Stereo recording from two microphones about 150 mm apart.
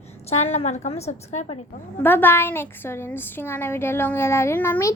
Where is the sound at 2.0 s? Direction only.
15° left (ahead or behind).